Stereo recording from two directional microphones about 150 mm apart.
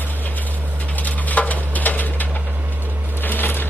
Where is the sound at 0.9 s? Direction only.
10° left (ahead or behind).